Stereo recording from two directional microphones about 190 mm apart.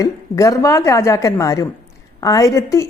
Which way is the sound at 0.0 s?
15° left (ahead or behind).